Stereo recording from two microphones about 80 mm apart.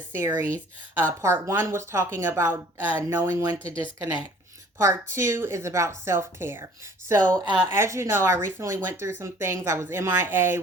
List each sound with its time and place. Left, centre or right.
0.1 s speech: right
1.2 s speech: right
3.4 s speech: right
4.8 s speech: right
7.2 s a woman's voice: centre
7.7 s speech: right